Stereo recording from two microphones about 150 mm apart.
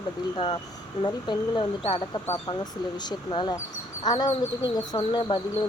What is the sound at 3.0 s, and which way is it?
Speech, 30° left (ahead or behind).